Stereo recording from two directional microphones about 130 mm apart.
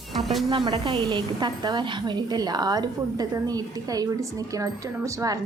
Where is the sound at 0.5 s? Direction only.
35° right (ahead or behind).